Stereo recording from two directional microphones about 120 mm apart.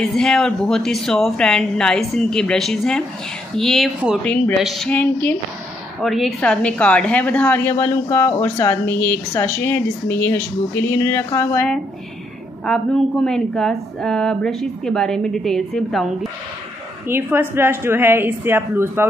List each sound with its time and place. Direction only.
0.1 s a woman's voice: 5° left (ahead or behind)
4.9 s a woman's voice: 15° left (ahead or behind)
6.0 s a woman's voice: centre (ahead or behind)
7.8 s a sound: 20° left (ahead or behind)
8.8 s a woman's voice: 15° left (ahead or behind)
10.9 s a sound: 20° left (ahead or behind)
12.6 s a woman's voice: 5° left (ahead or behind)
17.1 s a woman's voice: 20° right (ahead or behind)